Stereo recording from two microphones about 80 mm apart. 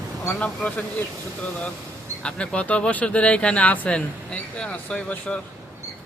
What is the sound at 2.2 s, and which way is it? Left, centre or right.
A man's voice, centre.